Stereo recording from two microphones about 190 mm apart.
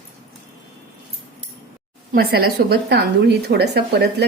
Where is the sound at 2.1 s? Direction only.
50° right (ahead or behind).